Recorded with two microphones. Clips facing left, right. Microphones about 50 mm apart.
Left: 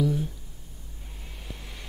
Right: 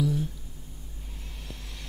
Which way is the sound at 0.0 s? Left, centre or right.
Centre.